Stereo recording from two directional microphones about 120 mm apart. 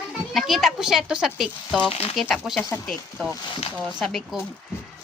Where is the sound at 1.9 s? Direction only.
55° left (ahead or behind).